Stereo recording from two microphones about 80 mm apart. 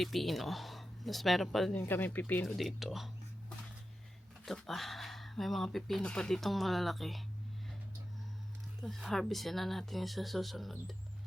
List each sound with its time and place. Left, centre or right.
0.0 s speech: centre
1.8 s speech: left
2.5 s speech: centre
4.4 s speech: centre
8.8 s speech: centre